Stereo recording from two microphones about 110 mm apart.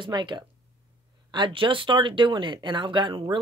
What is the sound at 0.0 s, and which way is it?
Speech, 45° right (ahead or behind).